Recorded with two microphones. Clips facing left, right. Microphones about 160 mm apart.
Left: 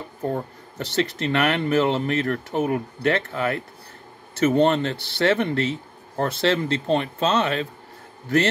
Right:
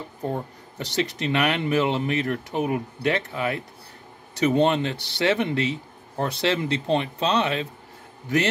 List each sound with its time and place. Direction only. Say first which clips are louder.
0.7 s speech: left 2 dB; 15° right (ahead or behind)